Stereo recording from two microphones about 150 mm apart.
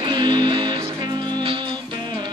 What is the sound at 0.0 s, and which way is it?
Music, 30° right (ahead or behind).